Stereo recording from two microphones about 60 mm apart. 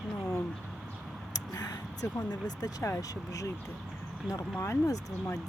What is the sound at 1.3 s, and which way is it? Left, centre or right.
Speech, left.